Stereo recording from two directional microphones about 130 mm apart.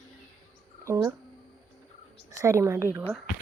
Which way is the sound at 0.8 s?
25° right (ahead or behind).